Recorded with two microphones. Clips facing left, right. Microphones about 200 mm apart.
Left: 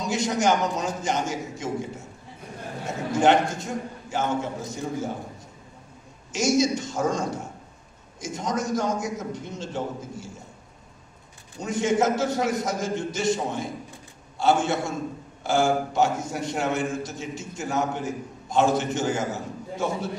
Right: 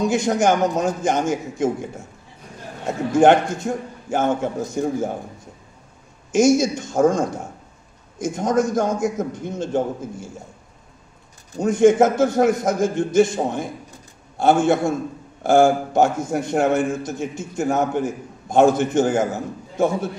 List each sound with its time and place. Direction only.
0.0 s a man's voice: 50° right (ahead or behind)
3.2 s a man's voice: 50° right (ahead or behind)
6.3 s a man's voice: 50° right (ahead or behind)
11.5 s a man's voice: 50° right (ahead or behind)